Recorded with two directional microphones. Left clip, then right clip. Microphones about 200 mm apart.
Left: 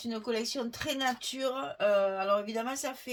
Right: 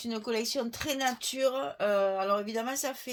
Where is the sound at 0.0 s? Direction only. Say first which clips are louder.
Right 1 dB; 35° right (ahead or behind).